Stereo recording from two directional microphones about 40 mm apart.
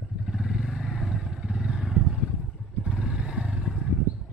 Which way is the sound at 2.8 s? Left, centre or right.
Right.